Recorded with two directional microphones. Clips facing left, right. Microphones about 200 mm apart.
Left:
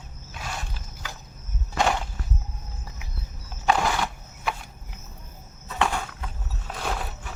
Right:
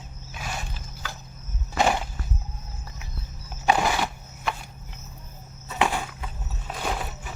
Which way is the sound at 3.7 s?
10° right (ahead or behind).